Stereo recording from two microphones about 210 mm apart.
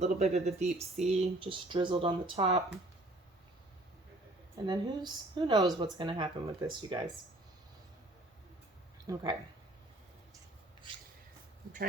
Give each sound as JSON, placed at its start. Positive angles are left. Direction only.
{"t": 0.0, "sound": "speech", "side_deg": -30}
{"t": 4.6, "sound": "speech", "side_deg": -20}
{"t": 9.1, "sound": "speech", "side_deg": -15}